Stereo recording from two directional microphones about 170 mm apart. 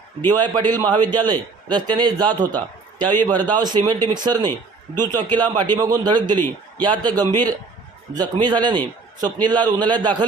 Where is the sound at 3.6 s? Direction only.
25° right (ahead or behind).